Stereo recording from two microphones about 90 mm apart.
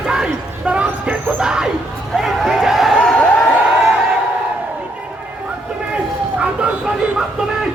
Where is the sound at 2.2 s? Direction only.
5° right (ahead or behind).